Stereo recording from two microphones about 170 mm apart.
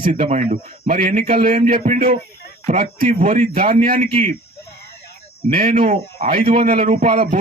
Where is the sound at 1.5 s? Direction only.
50° right (ahead or behind).